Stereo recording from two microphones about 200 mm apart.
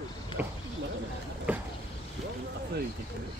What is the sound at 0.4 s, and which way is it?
Speech, 10° right (ahead or behind).